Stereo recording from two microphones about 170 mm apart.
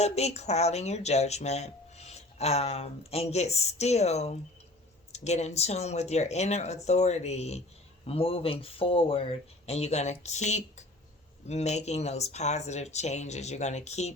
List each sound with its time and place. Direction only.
0.0 s speech: 40° left (ahead or behind)